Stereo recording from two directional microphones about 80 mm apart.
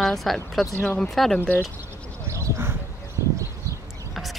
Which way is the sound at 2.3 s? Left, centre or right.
Right.